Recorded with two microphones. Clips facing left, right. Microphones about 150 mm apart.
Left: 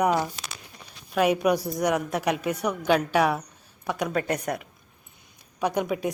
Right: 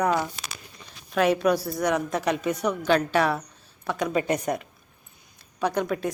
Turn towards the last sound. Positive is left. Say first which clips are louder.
# even
turn(degrees=10)  # may be behind; listen again after turning